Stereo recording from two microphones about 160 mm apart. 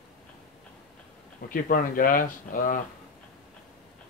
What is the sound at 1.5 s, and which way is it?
Speech, 60° left (ahead or behind).